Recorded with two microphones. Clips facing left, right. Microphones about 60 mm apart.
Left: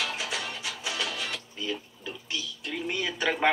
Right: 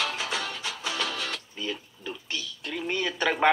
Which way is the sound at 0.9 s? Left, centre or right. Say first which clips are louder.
Right 1 dB; centre.